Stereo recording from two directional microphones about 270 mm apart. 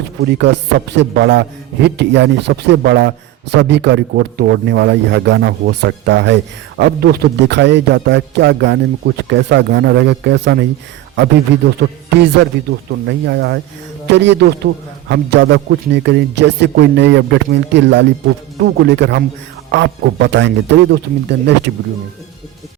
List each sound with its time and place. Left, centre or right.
0.2 s speech: right
11.8 s speech: right